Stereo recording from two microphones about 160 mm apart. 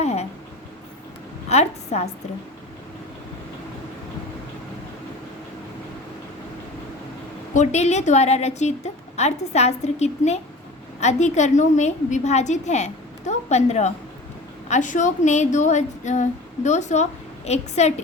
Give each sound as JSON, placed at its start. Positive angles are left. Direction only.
{"t": 0.0, "sound": "a sound", "side_deg": 40}
{"t": 1.5, "sound": "a woman's voice", "side_deg": 40}
{"t": 7.5, "sound": "a woman's voice", "side_deg": 45}